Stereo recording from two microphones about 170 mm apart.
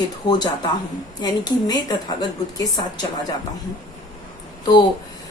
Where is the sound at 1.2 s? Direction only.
25° left (ahead or behind).